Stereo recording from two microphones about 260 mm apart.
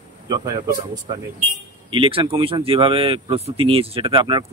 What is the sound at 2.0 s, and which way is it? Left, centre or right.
Speech, centre.